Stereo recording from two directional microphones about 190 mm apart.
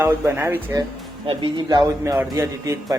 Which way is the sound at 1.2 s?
25° right (ahead or behind).